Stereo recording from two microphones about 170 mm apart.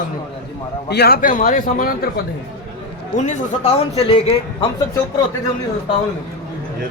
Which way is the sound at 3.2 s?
40° left (ahead or behind).